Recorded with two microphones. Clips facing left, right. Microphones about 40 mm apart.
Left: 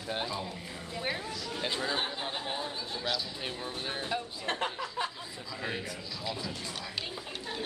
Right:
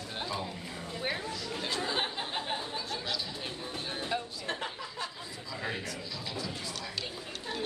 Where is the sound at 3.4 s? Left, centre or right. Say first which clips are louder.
Left 2 dB; centre.